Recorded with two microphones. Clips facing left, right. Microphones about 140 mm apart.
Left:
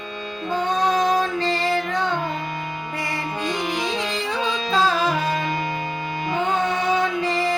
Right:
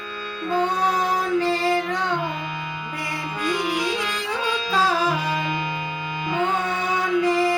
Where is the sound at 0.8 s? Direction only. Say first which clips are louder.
Left 3 dB; 10° right (ahead or behind).